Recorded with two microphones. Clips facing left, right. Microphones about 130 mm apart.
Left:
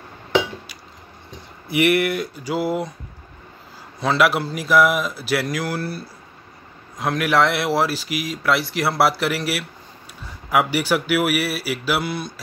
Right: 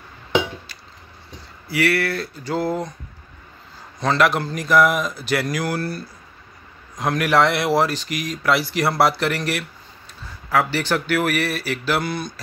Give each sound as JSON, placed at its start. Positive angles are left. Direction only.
{"t": 1.7, "sound": "speech", "side_deg": 20}
{"t": 4.0, "sound": "speech", "side_deg": 5}